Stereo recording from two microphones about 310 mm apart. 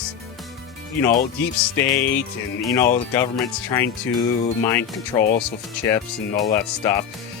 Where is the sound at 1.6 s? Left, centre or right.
Centre.